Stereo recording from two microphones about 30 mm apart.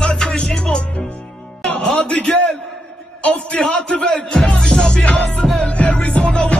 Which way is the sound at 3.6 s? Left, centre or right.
Left.